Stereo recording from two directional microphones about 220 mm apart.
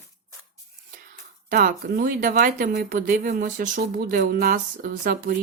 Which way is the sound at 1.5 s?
40° right (ahead or behind).